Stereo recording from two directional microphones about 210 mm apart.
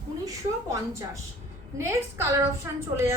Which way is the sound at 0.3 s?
15° right (ahead or behind).